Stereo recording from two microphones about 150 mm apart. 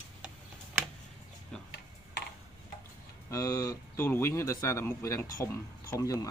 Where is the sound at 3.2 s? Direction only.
20° left (ahead or behind).